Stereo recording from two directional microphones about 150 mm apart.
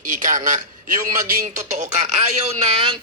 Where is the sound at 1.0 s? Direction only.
60° right (ahead or behind); by 2.9 s 40° right (ahead or behind).